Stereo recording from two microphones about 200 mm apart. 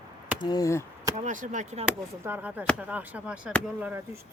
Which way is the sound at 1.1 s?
40° right (ahead or behind).